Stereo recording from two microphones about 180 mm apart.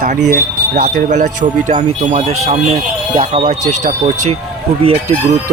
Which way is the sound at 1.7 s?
35° right (ahead or behind).